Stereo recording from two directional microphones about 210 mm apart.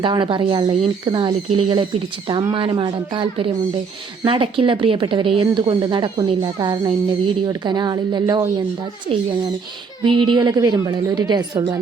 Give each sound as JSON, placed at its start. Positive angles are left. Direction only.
{"t": 0.0, "sound": "speech", "side_deg": -20}
{"t": 10.0, "sound": "speech", "side_deg": -25}